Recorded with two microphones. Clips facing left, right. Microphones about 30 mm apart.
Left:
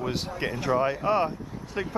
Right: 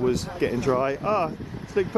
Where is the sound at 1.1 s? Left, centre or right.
Centre.